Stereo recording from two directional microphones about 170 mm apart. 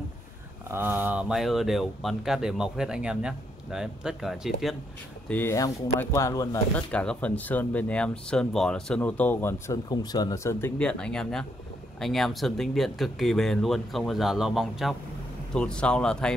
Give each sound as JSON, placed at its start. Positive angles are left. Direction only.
{"t": 0.7, "sound": "speech", "side_deg": -10}
{"t": 5.3, "sound": "speech", "side_deg": 15}
{"t": 6.9, "sound": "speech", "side_deg": 5}